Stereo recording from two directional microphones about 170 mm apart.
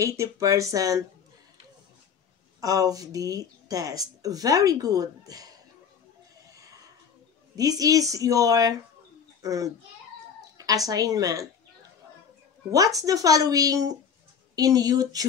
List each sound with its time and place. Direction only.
0.0 s speech: 15° right (ahead or behind)
2.6 s speech: 20° right (ahead or behind)
6.5 s neigh: 20° right (ahead or behind)
7.5 s a child's voice: 20° right (ahead or behind)
13.0 s speech: 20° right (ahead or behind)